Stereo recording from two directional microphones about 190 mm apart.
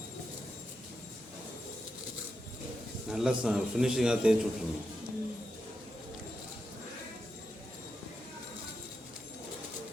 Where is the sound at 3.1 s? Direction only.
5° right (ahead or behind).